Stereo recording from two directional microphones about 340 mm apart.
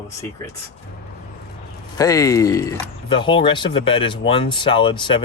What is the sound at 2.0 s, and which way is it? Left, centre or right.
Speech, centre.